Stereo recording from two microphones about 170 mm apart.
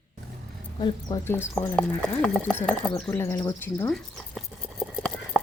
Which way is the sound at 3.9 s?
Centre (ahead or behind).